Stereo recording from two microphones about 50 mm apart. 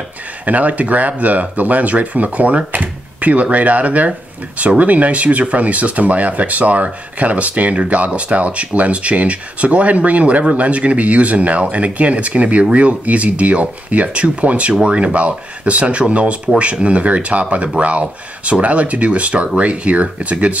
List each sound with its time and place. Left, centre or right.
0.5 s speech: right